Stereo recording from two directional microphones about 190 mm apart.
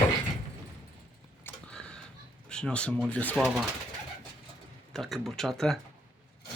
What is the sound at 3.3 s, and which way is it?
Speech, 5° right (ahead or behind).